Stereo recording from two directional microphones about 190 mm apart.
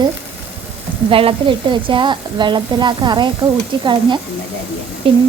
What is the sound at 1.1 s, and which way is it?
A woman's voice, 30° right (ahead or behind).